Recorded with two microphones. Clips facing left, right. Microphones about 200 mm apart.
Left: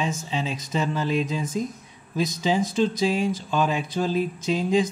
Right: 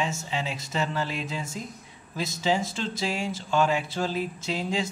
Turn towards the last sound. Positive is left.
turn(degrees=15)  # may be behind; listen again after turning